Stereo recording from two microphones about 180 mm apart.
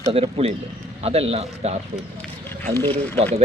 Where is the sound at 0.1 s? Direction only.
35° right (ahead or behind).